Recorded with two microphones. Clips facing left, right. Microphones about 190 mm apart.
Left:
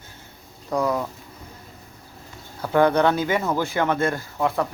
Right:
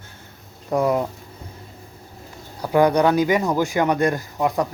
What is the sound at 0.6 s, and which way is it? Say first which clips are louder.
Speech: right 3 dB; 20° right (ahead or behind).